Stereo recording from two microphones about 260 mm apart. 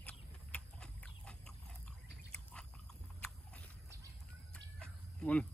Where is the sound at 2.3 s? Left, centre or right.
Centre.